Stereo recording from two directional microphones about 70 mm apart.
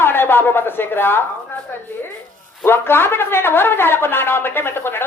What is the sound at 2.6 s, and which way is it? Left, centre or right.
Speech, left.